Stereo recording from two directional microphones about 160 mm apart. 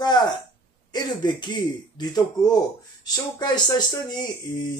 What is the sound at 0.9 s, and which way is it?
Speech, 25° left (ahead or behind).